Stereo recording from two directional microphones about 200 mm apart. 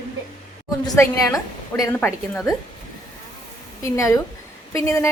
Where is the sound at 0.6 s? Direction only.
20° left (ahead or behind).